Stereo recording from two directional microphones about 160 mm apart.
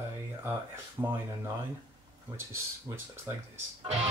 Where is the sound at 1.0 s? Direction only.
15° right (ahead or behind).